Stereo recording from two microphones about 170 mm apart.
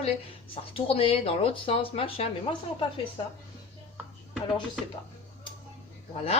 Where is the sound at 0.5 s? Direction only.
35° left (ahead or behind).